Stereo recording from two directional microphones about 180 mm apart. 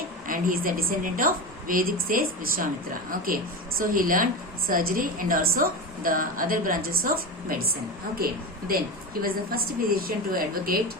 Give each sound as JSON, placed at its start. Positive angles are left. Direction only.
{"t": 0.3, "sound": "a woman's voice", "side_deg": -50}